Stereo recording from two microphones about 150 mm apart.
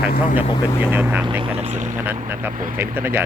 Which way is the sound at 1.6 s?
55° right (ahead or behind).